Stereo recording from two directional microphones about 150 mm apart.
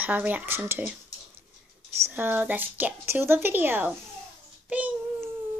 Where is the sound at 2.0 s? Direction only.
15° right (ahead or behind).